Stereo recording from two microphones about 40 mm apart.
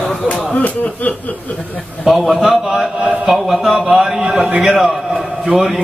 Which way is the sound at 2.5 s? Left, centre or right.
Centre.